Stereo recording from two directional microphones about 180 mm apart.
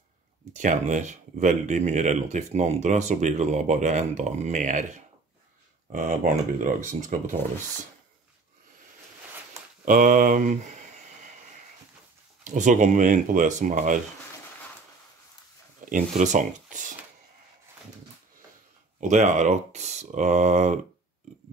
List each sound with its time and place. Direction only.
0.5 s speech: 45° right (ahead or behind)
9.8 s a sound: 45° right (ahead or behind)
12.4 s speech: 45° right (ahead or behind)
15.8 s speech: 45° right (ahead or behind)
18.9 s speech: 40° right (ahead or behind)